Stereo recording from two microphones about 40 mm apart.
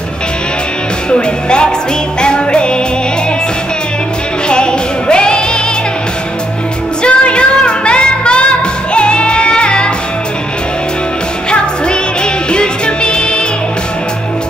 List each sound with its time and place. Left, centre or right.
1.1 s speech: left
2.2 s music: left
4.5 s music: left
7.0 s music: left
12.4 s music: left